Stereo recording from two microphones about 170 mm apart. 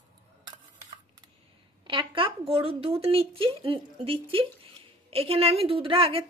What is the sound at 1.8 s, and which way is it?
A woman's voice, 30° right (ahead or behind).